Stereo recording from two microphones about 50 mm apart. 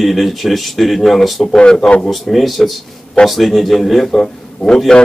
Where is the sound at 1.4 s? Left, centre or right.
Centre.